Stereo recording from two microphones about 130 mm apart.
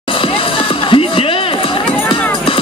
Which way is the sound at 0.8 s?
45° left (ahead or behind).